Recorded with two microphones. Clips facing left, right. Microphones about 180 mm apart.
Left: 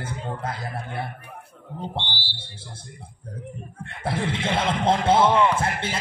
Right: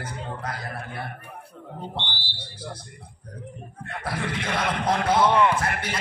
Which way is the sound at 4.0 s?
25° left (ahead or behind).